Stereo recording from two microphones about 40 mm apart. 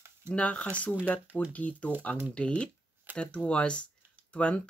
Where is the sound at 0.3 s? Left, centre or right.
Left.